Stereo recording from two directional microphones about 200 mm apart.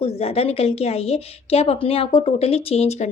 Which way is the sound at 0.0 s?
30° left (ahead or behind).